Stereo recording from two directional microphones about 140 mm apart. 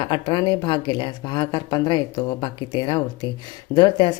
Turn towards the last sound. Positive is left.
turn(degrees=30)  # may be behind; listen again after turning